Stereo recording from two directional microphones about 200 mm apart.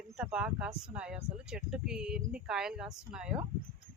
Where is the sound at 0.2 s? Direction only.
5° right (ahead or behind).